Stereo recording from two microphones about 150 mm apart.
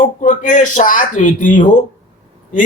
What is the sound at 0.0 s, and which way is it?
Speech, 55° left (ahead or behind).